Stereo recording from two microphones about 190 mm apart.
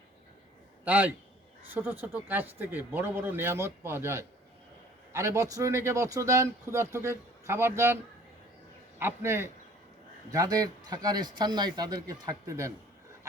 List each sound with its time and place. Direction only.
0.9 s speech: 10° right (ahead or behind)
9.0 s a man's voice: 15° right (ahead or behind)